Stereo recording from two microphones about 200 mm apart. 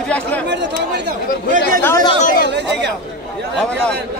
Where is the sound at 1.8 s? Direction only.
15° left (ahead or behind).